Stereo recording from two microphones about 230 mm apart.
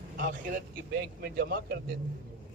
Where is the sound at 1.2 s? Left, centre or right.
Right.